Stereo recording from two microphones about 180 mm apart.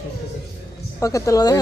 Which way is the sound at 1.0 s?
20° left (ahead or behind).